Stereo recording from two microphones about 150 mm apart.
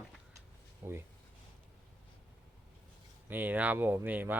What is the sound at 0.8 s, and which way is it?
Speech, 15° right (ahead or behind).